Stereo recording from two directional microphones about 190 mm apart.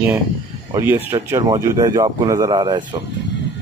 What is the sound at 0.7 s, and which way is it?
Speech, 15° right (ahead or behind).